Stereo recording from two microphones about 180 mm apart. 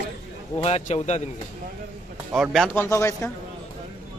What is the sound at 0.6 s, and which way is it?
Speech, 35° left (ahead or behind).